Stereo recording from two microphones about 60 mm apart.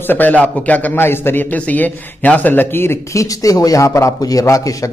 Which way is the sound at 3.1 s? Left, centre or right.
Left.